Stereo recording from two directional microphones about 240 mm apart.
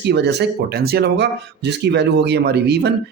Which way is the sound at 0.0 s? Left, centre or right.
Right.